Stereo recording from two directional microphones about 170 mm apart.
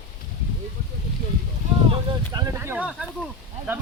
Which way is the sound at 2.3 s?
20° right (ahead or behind).